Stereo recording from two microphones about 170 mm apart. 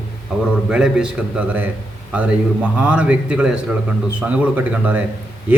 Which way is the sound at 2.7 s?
5° right (ahead or behind).